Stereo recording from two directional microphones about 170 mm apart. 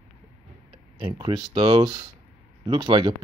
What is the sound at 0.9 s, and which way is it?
Speech, 25° right (ahead or behind).